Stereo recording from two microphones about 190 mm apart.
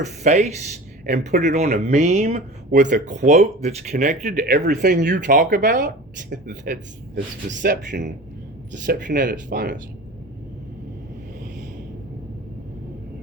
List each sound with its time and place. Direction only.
0.0 s speech: 40° right (ahead or behind)
7.4 s speech: 55° right (ahead or behind)